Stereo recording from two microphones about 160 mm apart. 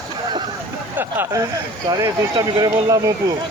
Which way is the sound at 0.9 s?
15° right (ahead or behind).